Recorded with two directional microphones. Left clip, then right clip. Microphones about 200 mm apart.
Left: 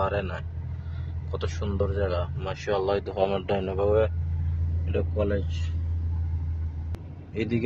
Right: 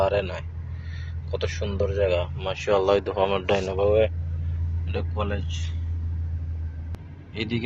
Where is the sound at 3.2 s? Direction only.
15° left (ahead or behind).